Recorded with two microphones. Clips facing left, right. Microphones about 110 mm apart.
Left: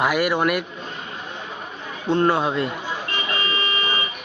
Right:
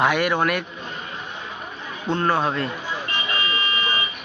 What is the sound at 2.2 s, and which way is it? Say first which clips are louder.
Speech: even; 10° left (ahead or behind).